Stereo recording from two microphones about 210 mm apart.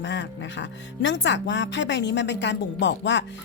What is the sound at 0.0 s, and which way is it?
Speech, 60° left (ahead or behind).